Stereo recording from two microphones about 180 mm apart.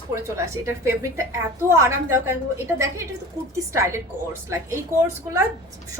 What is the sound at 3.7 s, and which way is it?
Speech, 15° right (ahead or behind).